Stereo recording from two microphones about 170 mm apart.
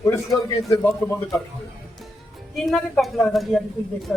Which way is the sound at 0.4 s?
20° left (ahead or behind).